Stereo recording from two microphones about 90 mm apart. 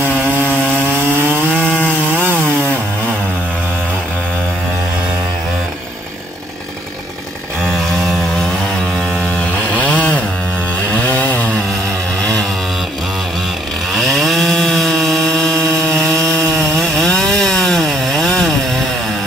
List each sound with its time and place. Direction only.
0.0 s chainsaw: 20° right (ahead or behind)
1.5 s wood: 10° left (ahead or behind)
7.6 s vehicle: centre (ahead or behind)
8.9 s chainsaw: 10° left (ahead or behind)
13.9 s chainsaw: centre (ahead or behind)
16.3 s chainsaw: 35° right (ahead or behind)
16.8 s chainsaw: 10° left (ahead or behind)